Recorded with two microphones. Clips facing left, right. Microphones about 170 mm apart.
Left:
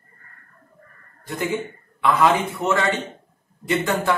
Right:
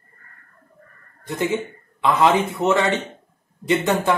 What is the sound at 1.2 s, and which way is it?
A man's voice, 20° right (ahead or behind).